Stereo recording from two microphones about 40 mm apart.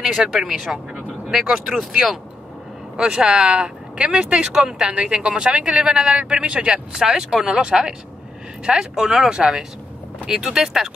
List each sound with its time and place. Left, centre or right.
0.2 s speech: centre
3.0 s speech: centre